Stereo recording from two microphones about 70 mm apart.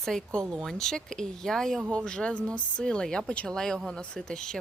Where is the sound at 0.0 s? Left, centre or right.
Centre.